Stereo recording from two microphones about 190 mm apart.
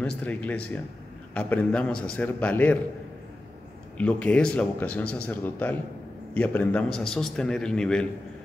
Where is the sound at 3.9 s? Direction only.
5° left (ahead or behind).